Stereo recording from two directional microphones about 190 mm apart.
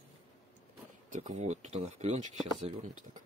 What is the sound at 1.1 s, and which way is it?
Speech, 35° right (ahead or behind).